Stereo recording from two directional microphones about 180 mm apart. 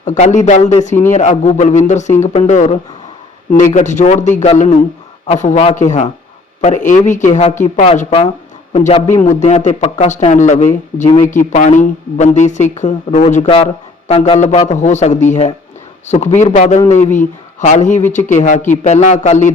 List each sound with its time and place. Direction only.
0.0 s a woman's voice: 40° left (ahead or behind)
3.8 s a woman's voice: 40° left (ahead or behind)